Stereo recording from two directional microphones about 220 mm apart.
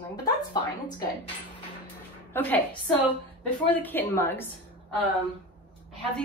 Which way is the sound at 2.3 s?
5° left (ahead or behind).